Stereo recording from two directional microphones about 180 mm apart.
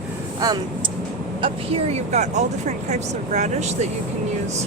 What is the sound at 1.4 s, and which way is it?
Speech, 35° right (ahead or behind).